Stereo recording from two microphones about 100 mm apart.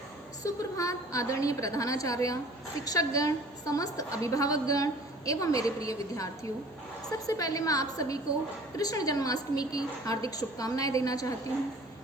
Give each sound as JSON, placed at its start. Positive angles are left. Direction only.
{"t": 0.4, "sound": "a woman's voice", "side_deg": 35}
{"t": 7.3, "sound": "a woman's voice", "side_deg": 35}